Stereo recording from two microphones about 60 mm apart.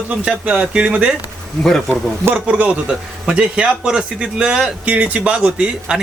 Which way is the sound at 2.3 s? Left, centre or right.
Centre.